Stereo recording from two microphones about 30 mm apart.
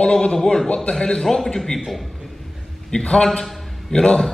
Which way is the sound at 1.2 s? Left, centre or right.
Centre.